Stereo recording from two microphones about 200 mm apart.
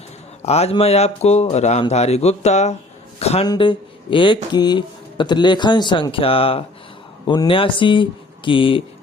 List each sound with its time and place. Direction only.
0.4 s speech: 30° left (ahead or behind)
3.2 s a sound: 30° left (ahead or behind)
3.4 s a man's voice: 20° left (ahead or behind)